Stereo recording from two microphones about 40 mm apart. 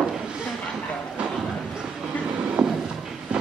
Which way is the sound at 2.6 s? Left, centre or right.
Right.